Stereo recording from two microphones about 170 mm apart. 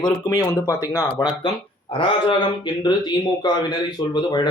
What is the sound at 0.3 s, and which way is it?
Speech, 20° left (ahead or behind).